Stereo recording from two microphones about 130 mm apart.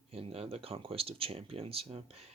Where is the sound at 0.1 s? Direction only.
50° right (ahead or behind).